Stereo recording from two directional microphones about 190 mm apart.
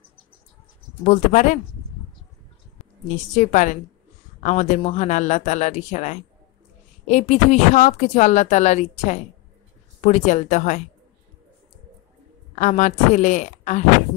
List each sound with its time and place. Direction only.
1.0 s speech: 40° left (ahead or behind)
3.3 s speech: 40° left (ahead or behind)
12.5 s speech: 40° left (ahead or behind)